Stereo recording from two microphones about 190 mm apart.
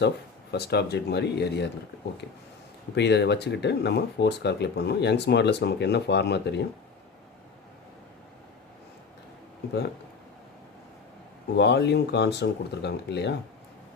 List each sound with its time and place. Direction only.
0.5 s speech: 60° left (ahead or behind)
2.9 s speech: 65° left (ahead or behind)
11.5 s speech: 65° left (ahead or behind)